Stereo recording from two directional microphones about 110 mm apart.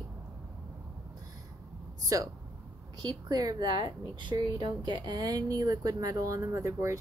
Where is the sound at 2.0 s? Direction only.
30° right (ahead or behind).